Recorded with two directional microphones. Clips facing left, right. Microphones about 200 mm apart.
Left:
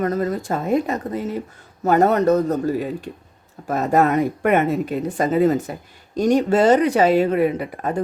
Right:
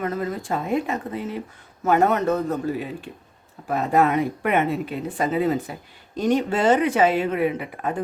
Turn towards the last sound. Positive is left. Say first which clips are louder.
# left 3 dB
turn(degrees=40)  # may be behind; listen again after turning